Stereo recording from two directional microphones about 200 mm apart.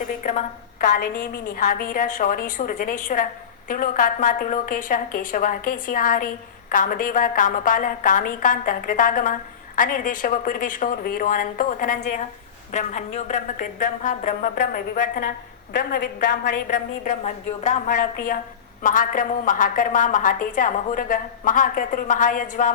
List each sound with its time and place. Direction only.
0.2 s a woman's voice: 40° left (ahead or behind)
12.7 s a woman's voice: 35° left (ahead or behind)